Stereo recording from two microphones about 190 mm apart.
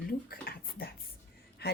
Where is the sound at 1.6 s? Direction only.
55° left (ahead or behind).